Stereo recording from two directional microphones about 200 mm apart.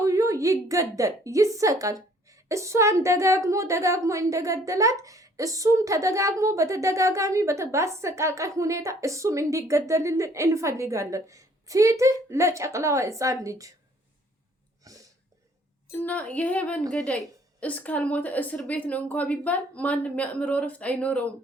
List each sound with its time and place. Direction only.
0.0 s a woman's voice: 15° right (ahead or behind)
14.8 s a sound: 15° right (ahead or behind)
15.9 s a woman's voice: 10° left (ahead or behind)